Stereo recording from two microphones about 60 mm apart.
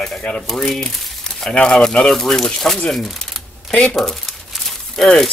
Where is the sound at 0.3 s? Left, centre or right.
Centre.